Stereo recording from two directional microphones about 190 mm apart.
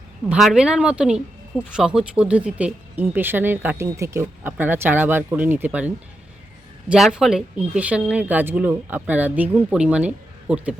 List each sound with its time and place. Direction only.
0.3 s speech: 5° right (ahead or behind)